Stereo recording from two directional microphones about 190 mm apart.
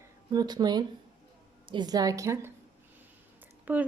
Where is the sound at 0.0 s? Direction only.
20° right (ahead or behind).